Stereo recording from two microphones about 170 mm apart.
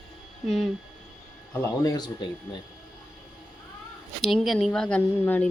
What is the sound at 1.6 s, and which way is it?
Speech, 20° left (ahead or behind).